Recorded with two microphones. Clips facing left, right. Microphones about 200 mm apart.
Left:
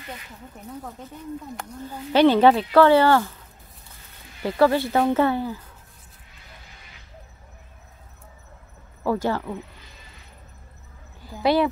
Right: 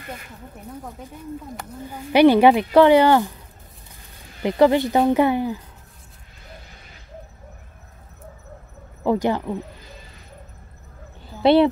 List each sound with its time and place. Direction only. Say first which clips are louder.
1.9 s speech: right 3 dB; 15° right (ahead or behind)
4.4 s speech: right 3 dB; 20° right (ahead or behind)
9.0 s speech: right 3 dB; 20° right (ahead or behind)
11.4 s speech: right 5 dB; 25° right (ahead or behind)